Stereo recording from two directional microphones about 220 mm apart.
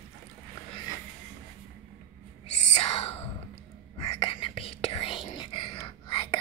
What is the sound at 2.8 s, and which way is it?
Whispering, 25° left (ahead or behind).